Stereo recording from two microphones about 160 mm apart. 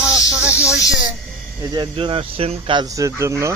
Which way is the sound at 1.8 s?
35° right (ahead or behind).